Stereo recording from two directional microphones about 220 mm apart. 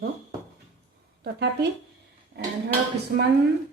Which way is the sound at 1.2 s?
50° right (ahead or behind).